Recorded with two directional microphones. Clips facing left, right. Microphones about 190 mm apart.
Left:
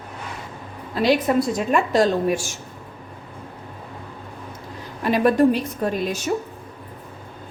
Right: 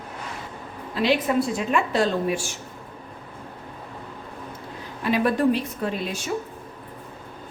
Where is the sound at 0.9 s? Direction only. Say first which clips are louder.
Left 3 dB; 40° left (ahead or behind).